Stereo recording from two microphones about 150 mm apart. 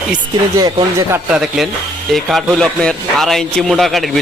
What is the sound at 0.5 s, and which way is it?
Speech, 25° right (ahead or behind).